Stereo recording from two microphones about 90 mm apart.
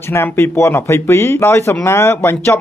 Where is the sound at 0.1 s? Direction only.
30° left (ahead or behind).